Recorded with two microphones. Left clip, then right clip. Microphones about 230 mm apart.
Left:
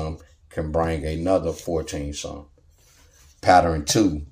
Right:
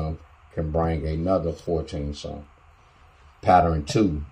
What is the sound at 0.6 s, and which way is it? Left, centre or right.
Speech, centre.